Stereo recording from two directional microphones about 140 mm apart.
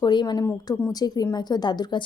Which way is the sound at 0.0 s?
30° left (ahead or behind).